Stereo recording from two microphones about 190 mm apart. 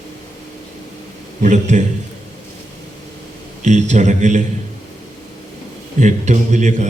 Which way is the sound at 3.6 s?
40° right (ahead or behind).